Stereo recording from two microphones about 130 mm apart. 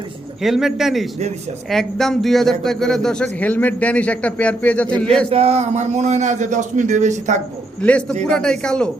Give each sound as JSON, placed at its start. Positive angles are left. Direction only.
{"t": 0.4, "sound": "a man's voice", "side_deg": -5}
{"t": 5.3, "sound": "a man's voice", "side_deg": -50}
{"t": 7.8, "sound": "speech", "side_deg": 10}